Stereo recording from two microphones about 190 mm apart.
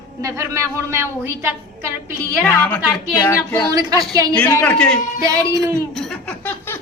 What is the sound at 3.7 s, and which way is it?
Speech, 20° right (ahead or behind).